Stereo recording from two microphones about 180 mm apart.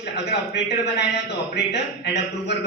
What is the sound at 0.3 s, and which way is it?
Speech, 70° left (ahead or behind).